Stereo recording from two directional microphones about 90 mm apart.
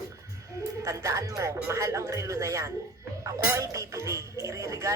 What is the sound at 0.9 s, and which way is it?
Speech, 35° right (ahead or behind).